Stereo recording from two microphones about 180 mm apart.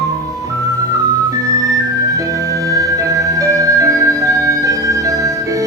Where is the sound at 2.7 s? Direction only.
20° right (ahead or behind).